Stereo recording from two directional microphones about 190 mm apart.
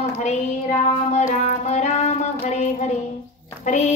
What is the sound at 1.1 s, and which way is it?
Music, 35° left (ahead or behind).